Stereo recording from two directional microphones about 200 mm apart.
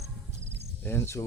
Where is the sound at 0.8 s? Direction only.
10° left (ahead or behind).